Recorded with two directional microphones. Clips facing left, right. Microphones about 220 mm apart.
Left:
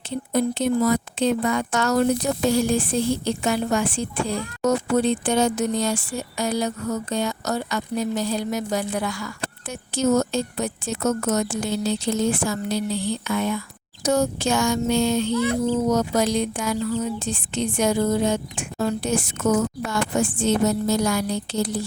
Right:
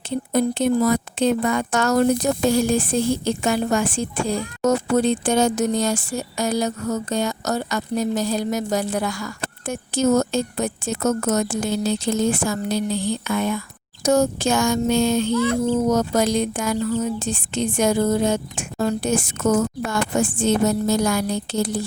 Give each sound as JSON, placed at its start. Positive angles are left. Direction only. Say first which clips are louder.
{"t": 0.3, "sound": "a woman's voice", "louder": "right 2 dB", "side_deg": -50}